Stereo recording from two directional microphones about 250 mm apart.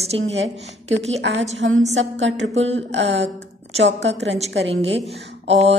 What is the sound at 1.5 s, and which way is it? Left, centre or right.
A woman's voice, right.